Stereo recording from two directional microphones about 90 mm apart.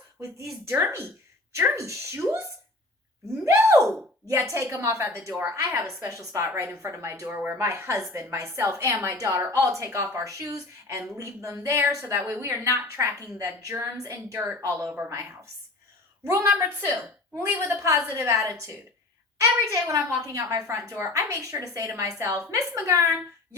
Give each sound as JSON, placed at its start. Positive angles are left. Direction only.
{"t": 0.7, "sound": "a woman's voice", "side_deg": -25}
{"t": 3.4, "sound": "a woman's voice", "side_deg": -35}
{"t": 16.2, "sound": "a woman's voice", "side_deg": -30}